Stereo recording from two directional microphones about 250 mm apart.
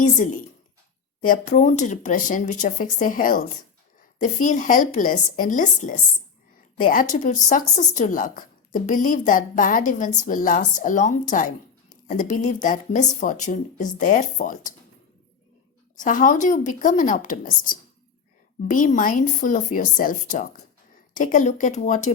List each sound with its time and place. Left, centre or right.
0.0 s a woman's voice: left
16.0 s a woman's voice: left